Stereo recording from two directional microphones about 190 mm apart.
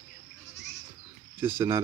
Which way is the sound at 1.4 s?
10° right (ahead or behind).